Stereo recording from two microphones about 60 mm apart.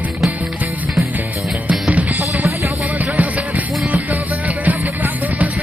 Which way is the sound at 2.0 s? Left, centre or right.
Right.